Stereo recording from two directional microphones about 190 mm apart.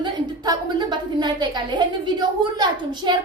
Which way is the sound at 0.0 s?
25° right (ahead or behind).